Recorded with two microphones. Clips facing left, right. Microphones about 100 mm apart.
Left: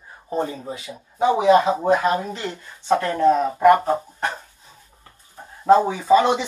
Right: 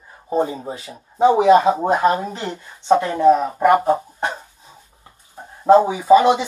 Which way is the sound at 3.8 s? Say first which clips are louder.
Right 3 dB; 20° right (ahead or behind).